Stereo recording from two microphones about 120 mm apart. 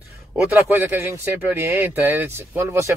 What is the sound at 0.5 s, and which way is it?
Speech, 15° right (ahead or behind).